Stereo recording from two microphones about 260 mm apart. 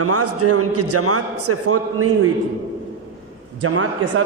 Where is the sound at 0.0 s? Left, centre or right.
Right.